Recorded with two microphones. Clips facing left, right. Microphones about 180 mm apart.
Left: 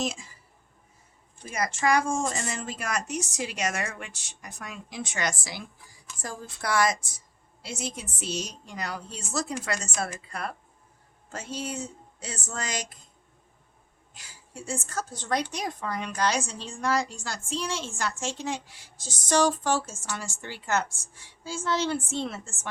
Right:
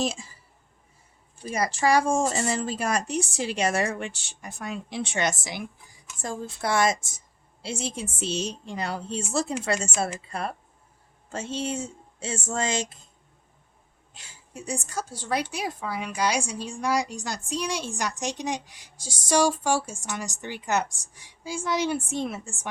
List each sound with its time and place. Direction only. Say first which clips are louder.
0.0 s speech: right 3 dB; 30° right (ahead or behind)
1.5 s a woman's voice: right 2 dB; 35° right (ahead or behind)
14.1 s a sound: right 2 dB; 25° right (ahead or behind)
14.8 s a woman's voice: left 1 dB; 10° right (ahead or behind)